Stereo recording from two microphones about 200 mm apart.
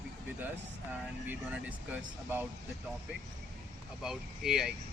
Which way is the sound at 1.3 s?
10° right (ahead or behind).